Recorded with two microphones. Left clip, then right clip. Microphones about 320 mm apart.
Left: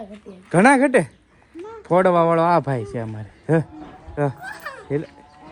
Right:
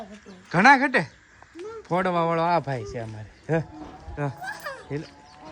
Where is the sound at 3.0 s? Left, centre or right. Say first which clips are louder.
Left 5 dB; left.